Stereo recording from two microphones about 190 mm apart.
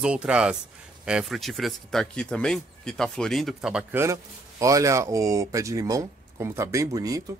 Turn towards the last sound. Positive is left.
turn(degrees=-20)  # may be behind; listen again after turning